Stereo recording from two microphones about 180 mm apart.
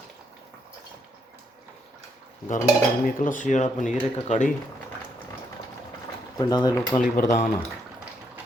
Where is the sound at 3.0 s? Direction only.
50° left (ahead or behind).